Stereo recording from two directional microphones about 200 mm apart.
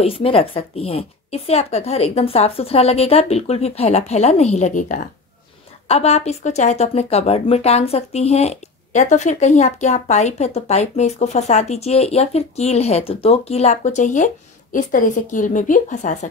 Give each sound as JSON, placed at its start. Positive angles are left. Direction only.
{"t": 0.0, "sound": "speech", "side_deg": 30}